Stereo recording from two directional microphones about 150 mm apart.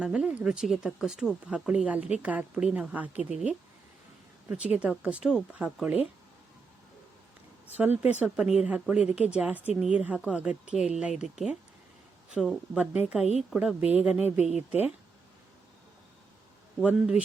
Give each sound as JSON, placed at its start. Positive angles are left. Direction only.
{"t": 0.0, "sound": "speech", "side_deg": -5}
{"t": 8.2, "sound": "speech", "side_deg": -5}
{"t": 14.3, "sound": "speech", "side_deg": 45}
{"t": 14.7, "sound": "speech", "side_deg": -5}
{"t": 16.8, "sound": "speech", "side_deg": -10}